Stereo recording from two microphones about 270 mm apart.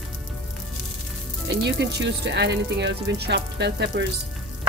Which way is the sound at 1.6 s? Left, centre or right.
Right.